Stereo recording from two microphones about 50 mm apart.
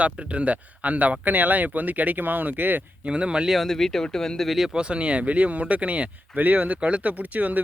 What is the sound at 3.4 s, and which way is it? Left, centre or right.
Speech, centre.